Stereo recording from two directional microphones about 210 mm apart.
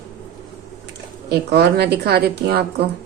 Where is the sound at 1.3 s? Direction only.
50° right (ahead or behind).